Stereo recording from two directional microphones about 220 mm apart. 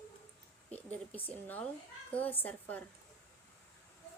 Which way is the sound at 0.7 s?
5° left (ahead or behind).